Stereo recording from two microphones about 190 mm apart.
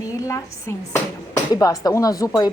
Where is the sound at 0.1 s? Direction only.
15° left (ahead or behind).